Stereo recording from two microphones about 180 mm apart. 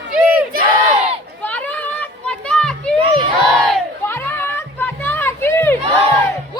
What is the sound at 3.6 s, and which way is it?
Crowd, 5° left (ahead or behind).